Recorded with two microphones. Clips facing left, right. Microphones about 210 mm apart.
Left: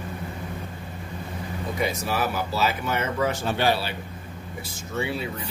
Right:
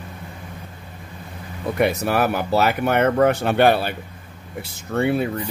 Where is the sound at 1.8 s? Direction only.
60° right (ahead or behind).